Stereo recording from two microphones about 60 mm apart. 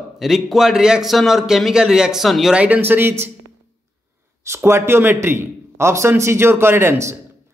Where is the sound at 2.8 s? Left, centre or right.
Right.